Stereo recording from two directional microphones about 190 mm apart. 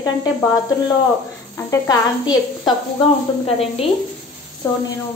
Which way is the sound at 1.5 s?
15° left (ahead or behind).